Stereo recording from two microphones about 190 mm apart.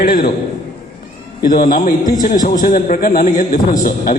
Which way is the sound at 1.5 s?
45° left (ahead or behind).